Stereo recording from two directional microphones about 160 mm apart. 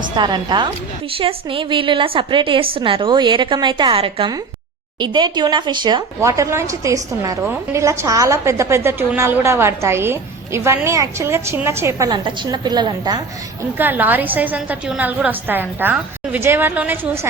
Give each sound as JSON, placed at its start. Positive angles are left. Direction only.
{"t": 0.2, "sound": "a woman's voice", "side_deg": -30}
{"t": 13.7, "sound": "a woman's voice", "side_deg": -10}